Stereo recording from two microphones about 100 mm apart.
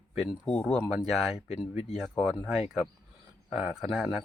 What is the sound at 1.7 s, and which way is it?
Speech, 90° left.